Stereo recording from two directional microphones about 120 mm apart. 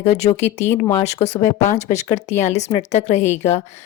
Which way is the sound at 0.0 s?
65° left (ahead or behind).